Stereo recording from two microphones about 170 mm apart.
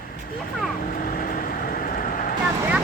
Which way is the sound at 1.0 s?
55° left (ahead or behind).